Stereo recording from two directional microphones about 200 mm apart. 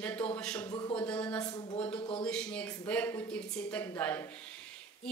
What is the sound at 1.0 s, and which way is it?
Speech, 5° left (ahead or behind).